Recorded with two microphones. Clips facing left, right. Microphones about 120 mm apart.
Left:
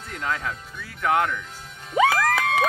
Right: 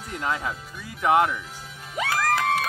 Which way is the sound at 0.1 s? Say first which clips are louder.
Right 1 dB; 10° right (ahead or behind).